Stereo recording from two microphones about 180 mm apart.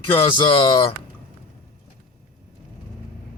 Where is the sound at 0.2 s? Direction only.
25° left (ahead or behind).